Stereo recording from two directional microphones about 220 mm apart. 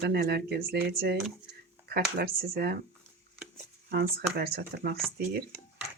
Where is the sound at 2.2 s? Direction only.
45° right (ahead or behind).